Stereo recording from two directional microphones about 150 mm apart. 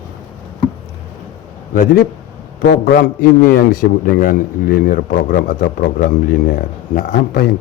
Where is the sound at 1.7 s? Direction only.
75° left (ahead or behind).